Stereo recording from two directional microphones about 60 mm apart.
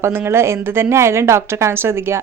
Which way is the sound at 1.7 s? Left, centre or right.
Right.